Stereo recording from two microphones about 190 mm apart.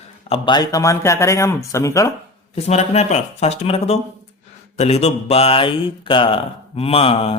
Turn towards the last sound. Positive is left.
turn(degrees=30)  # may be behind; listen again after turning